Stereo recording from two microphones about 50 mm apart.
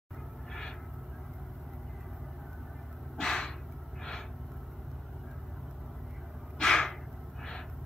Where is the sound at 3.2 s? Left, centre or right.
Centre.